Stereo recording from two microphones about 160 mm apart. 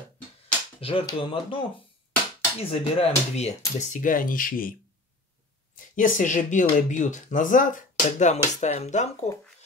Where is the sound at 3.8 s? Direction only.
50° left (ahead or behind).